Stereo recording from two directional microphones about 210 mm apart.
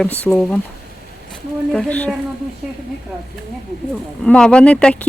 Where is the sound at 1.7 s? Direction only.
5° left (ahead or behind).